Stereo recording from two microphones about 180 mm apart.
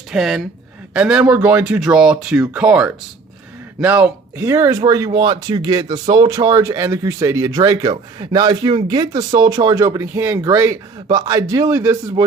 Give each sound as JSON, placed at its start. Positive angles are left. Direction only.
{"t": 0.1, "sound": "speech", "side_deg": 0}